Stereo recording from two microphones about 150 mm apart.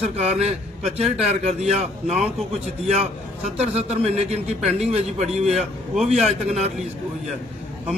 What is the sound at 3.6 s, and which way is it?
A man's voice, 45° right (ahead or behind).